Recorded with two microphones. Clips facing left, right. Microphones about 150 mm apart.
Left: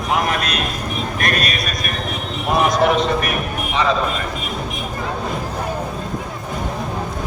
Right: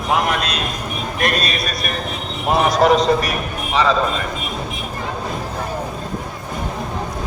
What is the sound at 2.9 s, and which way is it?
A man's voice, 35° right (ahead or behind).